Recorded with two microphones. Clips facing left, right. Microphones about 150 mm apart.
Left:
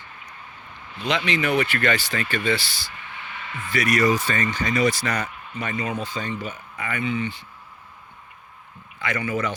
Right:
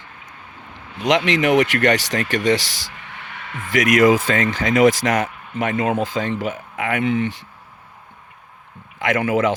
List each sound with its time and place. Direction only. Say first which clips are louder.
0.9 s speech: right 6 dB; 75° right (ahead or behind)
3.3 s speech: right 6 dB; 80° right
5.7 s speech: right 7 dB; 55° right (ahead or behind)
6.0 s speech: right 7 dB; 90° right
9.0 s speech: right 7 dB; 90° right